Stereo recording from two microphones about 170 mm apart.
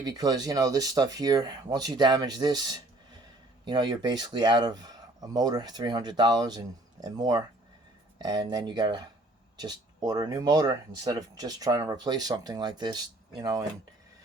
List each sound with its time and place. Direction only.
0.0 s speech: 25° right (ahead or behind)